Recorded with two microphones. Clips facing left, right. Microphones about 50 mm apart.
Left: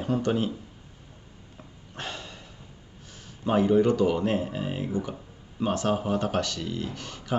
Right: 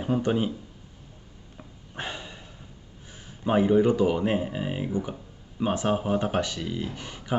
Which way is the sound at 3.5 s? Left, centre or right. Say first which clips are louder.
Right 1 dB; centre.